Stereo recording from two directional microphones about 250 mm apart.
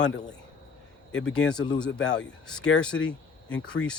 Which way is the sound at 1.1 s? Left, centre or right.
Centre.